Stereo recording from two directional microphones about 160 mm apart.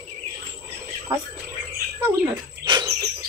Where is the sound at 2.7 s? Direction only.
25° right (ahead or behind).